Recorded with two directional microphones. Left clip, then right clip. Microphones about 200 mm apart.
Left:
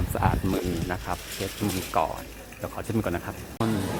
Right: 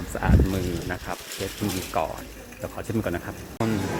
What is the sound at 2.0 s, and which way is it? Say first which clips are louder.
Speech: left 2 dB; 5° left (ahead or behind).